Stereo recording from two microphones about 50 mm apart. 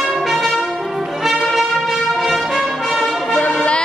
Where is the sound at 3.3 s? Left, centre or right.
Left.